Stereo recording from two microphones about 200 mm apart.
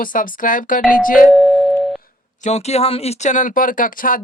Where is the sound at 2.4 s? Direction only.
35° left (ahead or behind).